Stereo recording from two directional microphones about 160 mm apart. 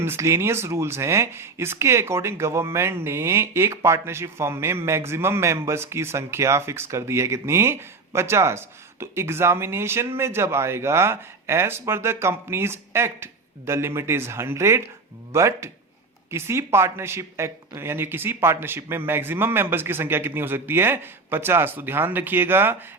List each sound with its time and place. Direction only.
0.0 s speech: 15° right (ahead or behind)